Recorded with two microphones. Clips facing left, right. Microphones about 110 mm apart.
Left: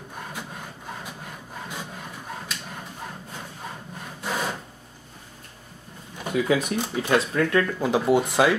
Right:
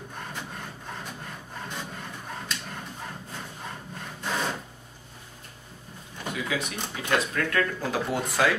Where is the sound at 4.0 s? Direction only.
10° left (ahead or behind).